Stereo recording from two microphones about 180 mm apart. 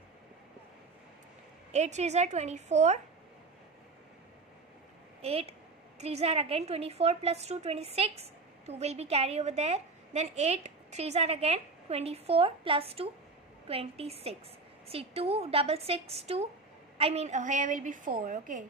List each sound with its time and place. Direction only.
1.7 s a woman's voice: 40° right (ahead or behind)
5.2 s a woman's voice: 35° right (ahead or behind)